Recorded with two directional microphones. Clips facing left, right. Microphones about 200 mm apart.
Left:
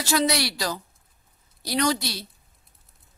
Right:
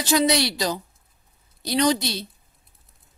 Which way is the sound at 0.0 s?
15° right (ahead or behind).